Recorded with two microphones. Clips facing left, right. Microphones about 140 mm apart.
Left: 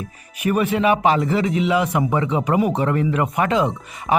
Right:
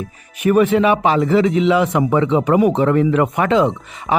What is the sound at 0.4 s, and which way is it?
Speech, 35° right (ahead or behind).